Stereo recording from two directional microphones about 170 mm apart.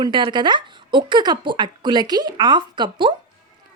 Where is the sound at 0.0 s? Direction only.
25° right (ahead or behind).